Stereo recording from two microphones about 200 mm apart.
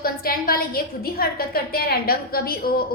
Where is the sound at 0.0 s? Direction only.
45° left (ahead or behind).